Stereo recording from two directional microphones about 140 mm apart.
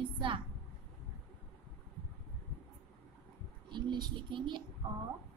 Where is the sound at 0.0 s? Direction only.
35° right (ahead or behind).